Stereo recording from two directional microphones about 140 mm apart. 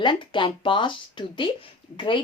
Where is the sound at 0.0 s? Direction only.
35° left (ahead or behind).